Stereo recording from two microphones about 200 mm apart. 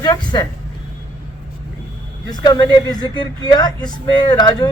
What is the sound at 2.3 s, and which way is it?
Speech, 20° left (ahead or behind).